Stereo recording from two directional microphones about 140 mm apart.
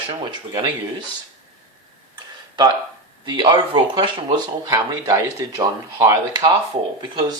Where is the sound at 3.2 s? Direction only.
35° right (ahead or behind).